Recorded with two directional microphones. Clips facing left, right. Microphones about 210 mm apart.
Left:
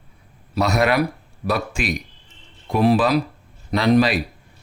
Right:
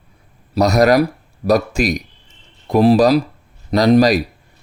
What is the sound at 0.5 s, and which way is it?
Speech, 40° right (ahead or behind).